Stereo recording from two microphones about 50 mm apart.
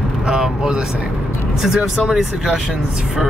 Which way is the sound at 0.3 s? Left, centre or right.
Centre.